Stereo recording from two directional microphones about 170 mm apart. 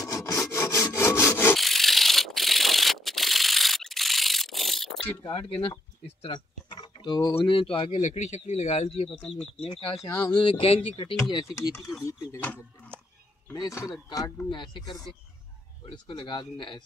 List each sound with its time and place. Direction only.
0.0 s sawing: 20° left (ahead or behind)
1.6 s rub: centre (ahead or behind)
5.2 s speech: 30° left (ahead or behind)
9.1 s speech: 5° left (ahead or behind)
9.6 s speech: 35° left (ahead or behind)
10.0 s speech: 15° left (ahead or behind)
10.3 s speech: 30° left (ahead or behind)
12.1 s speech: 15° left (ahead or behind)